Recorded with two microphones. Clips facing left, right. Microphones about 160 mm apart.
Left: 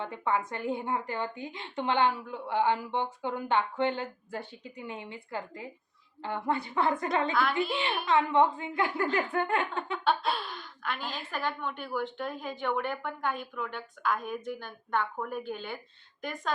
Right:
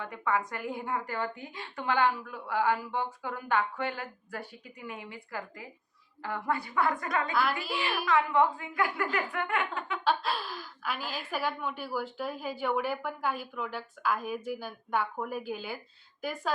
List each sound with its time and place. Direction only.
0.0 s a woman's voice: 25° left (ahead or behind)
10.0 s a woman's voice: centre (ahead or behind)